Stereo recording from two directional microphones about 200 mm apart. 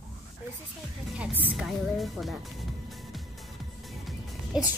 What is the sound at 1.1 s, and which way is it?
A woman's voice, 5° right (ahead or behind).